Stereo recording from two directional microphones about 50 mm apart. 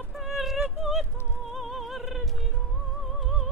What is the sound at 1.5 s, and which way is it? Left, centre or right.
Music, centre.